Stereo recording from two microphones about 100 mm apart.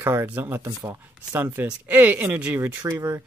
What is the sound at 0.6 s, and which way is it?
Speech, 35° right (ahead or behind).